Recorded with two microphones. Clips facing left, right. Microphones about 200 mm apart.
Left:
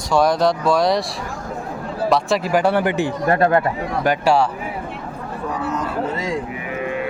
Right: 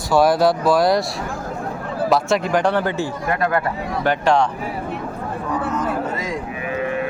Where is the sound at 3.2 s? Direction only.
30° left (ahead or behind).